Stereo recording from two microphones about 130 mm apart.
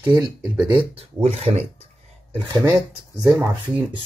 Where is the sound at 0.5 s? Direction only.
10° right (ahead or behind).